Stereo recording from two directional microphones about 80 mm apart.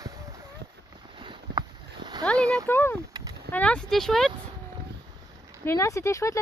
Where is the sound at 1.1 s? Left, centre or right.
Right.